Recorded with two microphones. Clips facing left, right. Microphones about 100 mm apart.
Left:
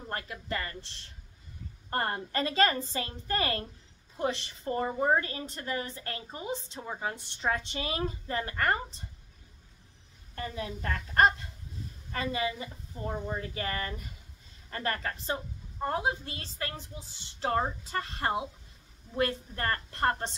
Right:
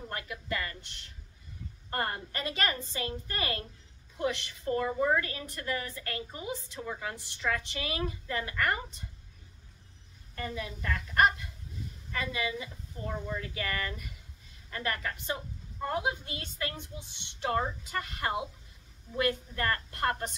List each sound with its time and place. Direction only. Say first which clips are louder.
0.1 s a woman's voice: left 2 dB; 40° left (ahead or behind)
10.3 s a woman's voice: left 1 dB; 40° left (ahead or behind)